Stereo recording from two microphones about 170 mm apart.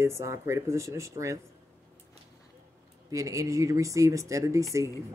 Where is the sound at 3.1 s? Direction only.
20° right (ahead or behind).